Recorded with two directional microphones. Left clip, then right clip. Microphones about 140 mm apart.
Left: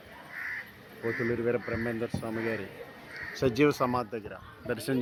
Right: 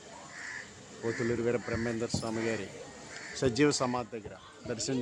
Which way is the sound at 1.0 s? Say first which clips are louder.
Left 2 dB; 10° left (ahead or behind).